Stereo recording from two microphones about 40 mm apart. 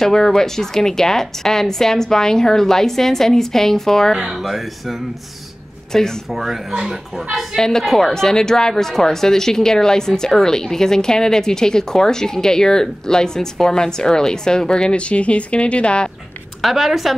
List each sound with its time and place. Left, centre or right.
0.0 s speech: centre
4.1 s speech: centre
5.9 s speech: centre
6.3 s a woman's voice: centre
7.5 s speech: centre
16.6 s speech: centre